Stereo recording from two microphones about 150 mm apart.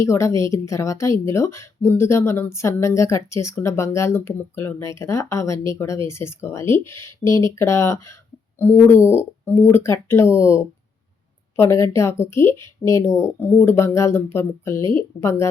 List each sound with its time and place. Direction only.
0.0 s a woman's voice: 20° left (ahead or behind)